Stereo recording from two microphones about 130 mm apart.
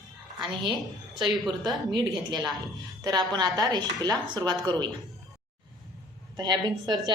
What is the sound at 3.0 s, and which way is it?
A woman's voice, 30° right (ahead or behind).